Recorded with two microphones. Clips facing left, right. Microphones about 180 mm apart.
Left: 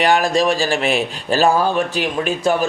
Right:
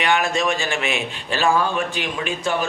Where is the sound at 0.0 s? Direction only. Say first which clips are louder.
Left 5 dB; 35° left (ahead or behind).